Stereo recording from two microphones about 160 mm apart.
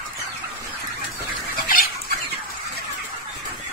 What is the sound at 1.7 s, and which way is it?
Dog, 65° left (ahead or behind).